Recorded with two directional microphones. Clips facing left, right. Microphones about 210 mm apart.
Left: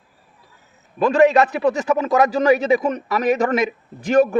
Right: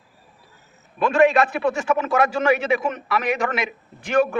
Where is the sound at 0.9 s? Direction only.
40° left (ahead or behind).